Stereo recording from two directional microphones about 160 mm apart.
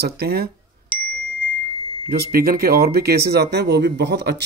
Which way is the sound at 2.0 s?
65° right (ahead or behind).